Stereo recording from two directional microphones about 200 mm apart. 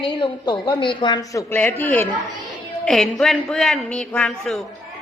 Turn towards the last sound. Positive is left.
turn(degrees=0)  # may be behind; listen again after turning